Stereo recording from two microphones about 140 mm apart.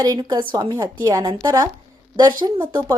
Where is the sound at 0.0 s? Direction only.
30° right (ahead or behind).